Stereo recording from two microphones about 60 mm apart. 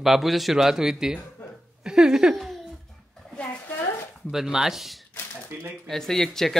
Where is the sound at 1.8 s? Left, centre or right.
Centre.